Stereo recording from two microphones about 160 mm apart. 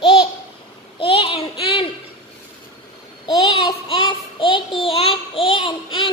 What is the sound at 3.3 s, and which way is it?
Child singing, 25° left (ahead or behind).